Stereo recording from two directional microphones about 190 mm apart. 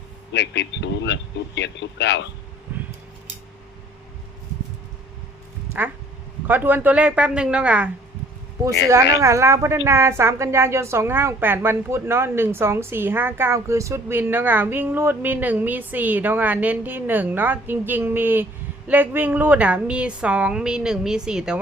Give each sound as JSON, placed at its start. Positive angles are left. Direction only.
{"t": 0.3, "sound": "a man's voice", "side_deg": 65}
{"t": 6.5, "sound": "a woman's voice", "side_deg": -10}
{"t": 9.2, "sound": "a woman's voice", "side_deg": -15}